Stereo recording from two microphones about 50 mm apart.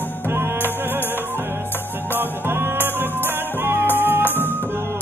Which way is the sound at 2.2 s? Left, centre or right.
Right.